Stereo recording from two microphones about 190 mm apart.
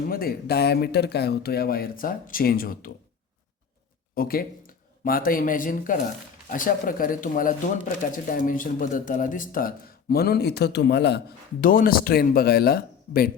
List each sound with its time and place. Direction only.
0.1 s speech: 50° left (ahead or behind)
4.1 s speech: 50° left (ahead or behind)
11.6 s speech: 50° left (ahead or behind)